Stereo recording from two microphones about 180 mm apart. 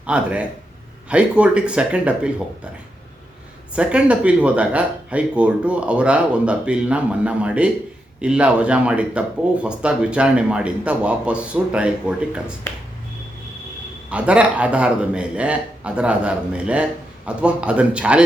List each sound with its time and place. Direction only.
0.0 s speech: 5° right (ahead or behind)
3.8 s speech: 5° right (ahead or behind)
14.1 s speech: 5° right (ahead or behind)